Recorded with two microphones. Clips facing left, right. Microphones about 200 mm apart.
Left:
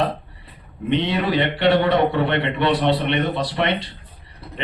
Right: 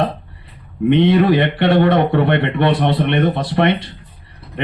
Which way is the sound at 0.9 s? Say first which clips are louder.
Right 8 dB; 55° right (ahead or behind).